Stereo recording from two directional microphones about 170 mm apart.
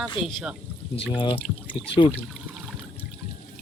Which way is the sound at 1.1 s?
30° left (ahead or behind).